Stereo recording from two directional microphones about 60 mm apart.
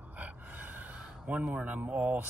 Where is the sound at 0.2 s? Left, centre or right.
Right.